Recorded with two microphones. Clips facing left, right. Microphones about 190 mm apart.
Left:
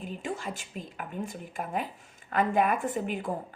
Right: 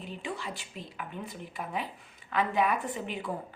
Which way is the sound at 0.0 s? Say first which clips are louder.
Left 3 dB; 45° left (ahead or behind).